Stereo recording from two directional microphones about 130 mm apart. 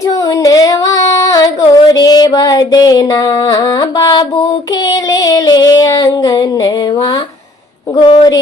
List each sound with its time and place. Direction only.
0.4 s female singing: 25° left (ahead or behind)
4.9 s child singing: 30° left (ahead or behind)
7.9 s speech: 35° left (ahead or behind)